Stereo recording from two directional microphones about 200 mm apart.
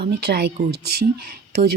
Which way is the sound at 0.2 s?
50° right (ahead or behind).